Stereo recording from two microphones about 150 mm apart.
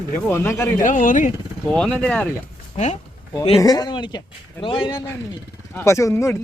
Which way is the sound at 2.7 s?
50° left (ahead or behind).